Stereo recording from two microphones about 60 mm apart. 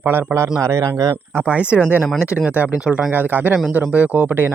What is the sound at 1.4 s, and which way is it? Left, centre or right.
Speech, right.